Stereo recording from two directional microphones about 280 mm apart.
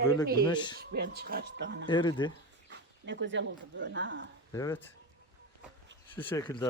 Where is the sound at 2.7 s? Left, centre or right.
Right.